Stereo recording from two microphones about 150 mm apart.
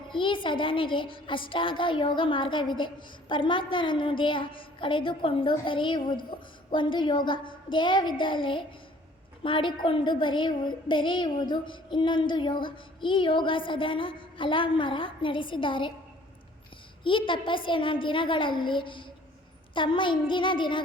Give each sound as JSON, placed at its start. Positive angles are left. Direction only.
{"t": 0.1, "sound": "speech", "side_deg": 35}
{"t": 17.0, "sound": "speech", "side_deg": 35}